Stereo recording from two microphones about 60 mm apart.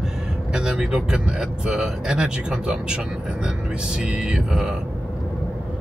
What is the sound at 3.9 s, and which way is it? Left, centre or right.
Speech, centre.